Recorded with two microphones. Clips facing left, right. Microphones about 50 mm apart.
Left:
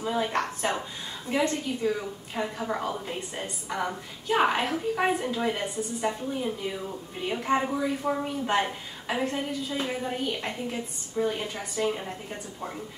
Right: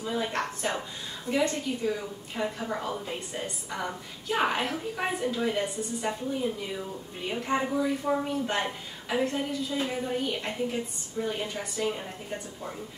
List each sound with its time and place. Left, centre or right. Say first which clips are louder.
0.0 s a woman's voice: left 3 dB; centre
1.9 s a woman's voice: left 2 dB; centre